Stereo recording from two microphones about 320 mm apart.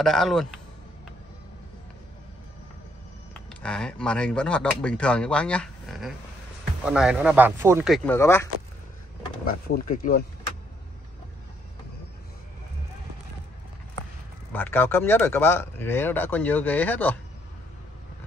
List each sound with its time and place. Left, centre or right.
0.0 s speech: centre
3.4 s speech: centre
9.5 s speech: left
14.5 s speech: centre